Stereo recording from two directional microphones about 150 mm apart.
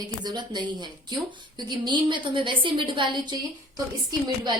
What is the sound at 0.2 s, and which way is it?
A woman's voice, 30° right (ahead or behind).